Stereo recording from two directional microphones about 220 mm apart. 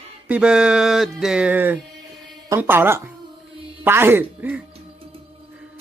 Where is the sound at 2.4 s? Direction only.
10° right (ahead or behind).